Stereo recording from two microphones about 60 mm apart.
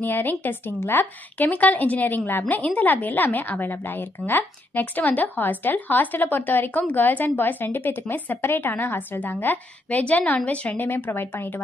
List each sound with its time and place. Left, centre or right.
0.0 s a woman's voice: left
2.4 s a woman's voice: left
10.8 s a woman's voice: left